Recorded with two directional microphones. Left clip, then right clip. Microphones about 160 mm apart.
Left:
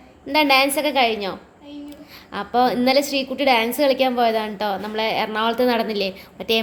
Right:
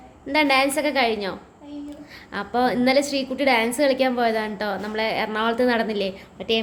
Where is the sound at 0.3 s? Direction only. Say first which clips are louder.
Left 3 dB; 10° left (ahead or behind).